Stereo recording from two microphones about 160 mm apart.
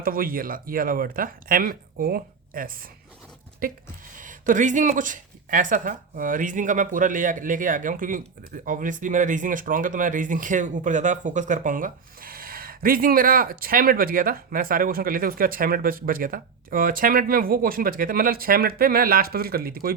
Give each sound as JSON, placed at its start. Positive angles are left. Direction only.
{"t": 0.0, "sound": "speech", "side_deg": -65}